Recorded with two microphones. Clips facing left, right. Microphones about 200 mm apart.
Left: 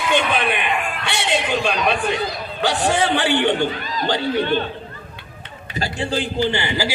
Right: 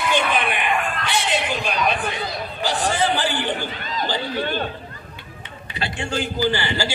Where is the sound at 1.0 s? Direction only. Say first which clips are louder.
Left 1 dB; 70° left (ahead or behind).